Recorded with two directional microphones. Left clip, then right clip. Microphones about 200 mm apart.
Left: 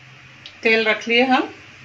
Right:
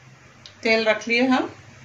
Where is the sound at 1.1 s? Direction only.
40° left (ahead or behind).